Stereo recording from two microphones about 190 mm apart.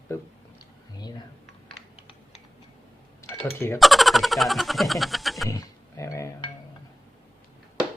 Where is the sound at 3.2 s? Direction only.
15° left (ahead or behind).